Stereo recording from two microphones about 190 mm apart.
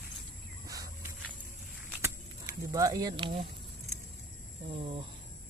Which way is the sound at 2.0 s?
15° right (ahead or behind).